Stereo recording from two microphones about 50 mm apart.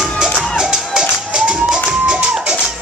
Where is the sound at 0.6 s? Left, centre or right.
Centre.